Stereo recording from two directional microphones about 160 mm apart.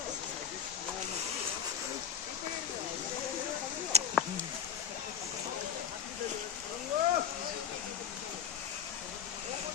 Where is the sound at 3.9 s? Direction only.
40° right (ahead or behind).